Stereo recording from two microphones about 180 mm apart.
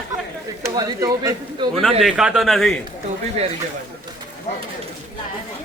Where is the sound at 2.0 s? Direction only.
5° right (ahead or behind).